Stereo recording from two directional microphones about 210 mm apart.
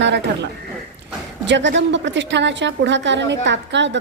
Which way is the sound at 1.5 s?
60° right (ahead or behind).